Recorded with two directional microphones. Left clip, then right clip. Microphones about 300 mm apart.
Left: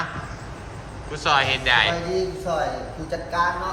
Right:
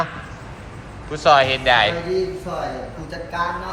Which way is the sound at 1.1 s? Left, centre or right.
Centre.